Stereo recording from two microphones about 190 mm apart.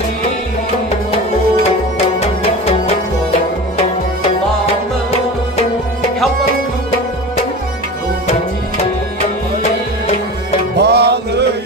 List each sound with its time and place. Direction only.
10.8 s music: 60° right (ahead or behind)